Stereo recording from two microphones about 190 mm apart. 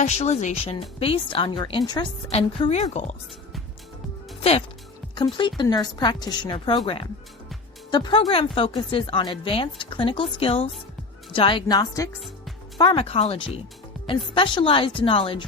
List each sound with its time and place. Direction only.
0.0 s a woman's voice: 35° left (ahead or behind)
5.1 s speech: 25° left (ahead or behind)